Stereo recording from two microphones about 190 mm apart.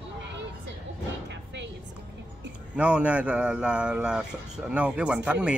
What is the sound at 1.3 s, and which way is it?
Music, 70° right (ahead or behind).